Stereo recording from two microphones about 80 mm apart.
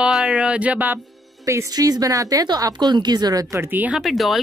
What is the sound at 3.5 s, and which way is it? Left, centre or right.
Speech, right.